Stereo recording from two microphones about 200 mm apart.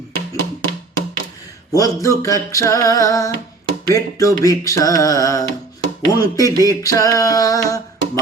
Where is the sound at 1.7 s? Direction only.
15° left (ahead or behind).